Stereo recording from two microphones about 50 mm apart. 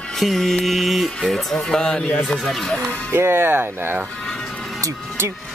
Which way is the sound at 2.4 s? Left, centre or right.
Centre.